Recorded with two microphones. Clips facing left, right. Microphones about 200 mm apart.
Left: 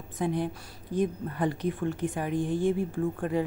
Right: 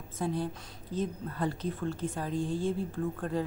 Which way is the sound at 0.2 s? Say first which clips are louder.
Left 3 dB; 15° left (ahead or behind).